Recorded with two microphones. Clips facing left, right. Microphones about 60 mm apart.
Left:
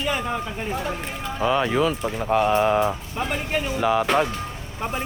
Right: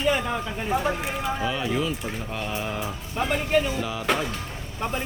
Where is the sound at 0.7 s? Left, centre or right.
Centre.